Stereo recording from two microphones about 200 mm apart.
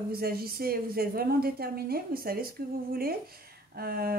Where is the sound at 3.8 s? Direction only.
50° right (ahead or behind).